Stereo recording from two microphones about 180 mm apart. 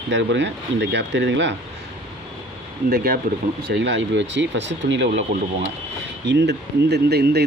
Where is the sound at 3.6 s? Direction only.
75° right (ahead or behind).